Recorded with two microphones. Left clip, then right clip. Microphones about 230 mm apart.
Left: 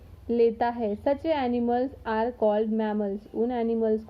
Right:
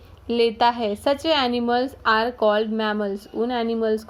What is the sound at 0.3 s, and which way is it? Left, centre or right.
A woman's voice, centre.